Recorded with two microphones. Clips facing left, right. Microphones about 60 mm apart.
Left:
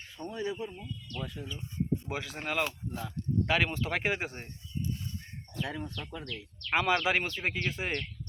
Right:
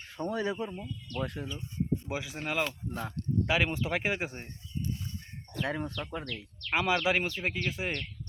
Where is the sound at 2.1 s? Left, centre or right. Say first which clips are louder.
Right 1 dB; centre.